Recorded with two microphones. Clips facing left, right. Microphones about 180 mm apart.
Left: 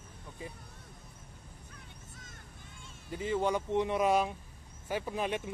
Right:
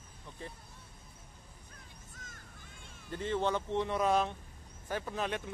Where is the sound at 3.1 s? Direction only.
5° left (ahead or behind).